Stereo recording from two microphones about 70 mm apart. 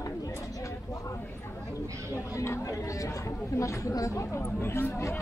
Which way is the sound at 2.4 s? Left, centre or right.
Left.